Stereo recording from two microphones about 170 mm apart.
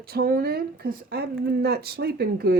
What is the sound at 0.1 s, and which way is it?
Speech, 60° right (ahead or behind).